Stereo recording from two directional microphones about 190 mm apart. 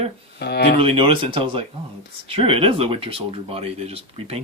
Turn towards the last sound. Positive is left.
turn(degrees=-30)  # may be behind; listen again after turning